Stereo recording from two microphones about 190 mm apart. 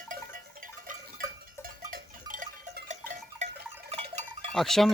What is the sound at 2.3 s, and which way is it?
Goat, 45° right (ahead or behind).